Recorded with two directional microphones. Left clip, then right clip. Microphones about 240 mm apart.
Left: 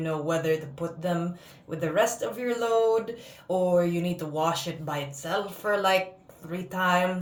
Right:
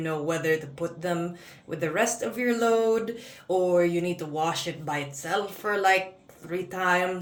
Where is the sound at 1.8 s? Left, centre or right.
Centre.